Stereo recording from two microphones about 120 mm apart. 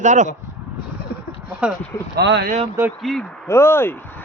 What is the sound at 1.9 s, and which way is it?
Speech, 25° left (ahead or behind).